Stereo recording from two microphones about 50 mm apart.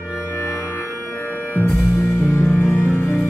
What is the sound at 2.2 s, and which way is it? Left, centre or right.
Music, left.